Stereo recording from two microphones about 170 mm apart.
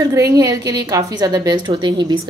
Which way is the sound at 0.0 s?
20° right (ahead or behind).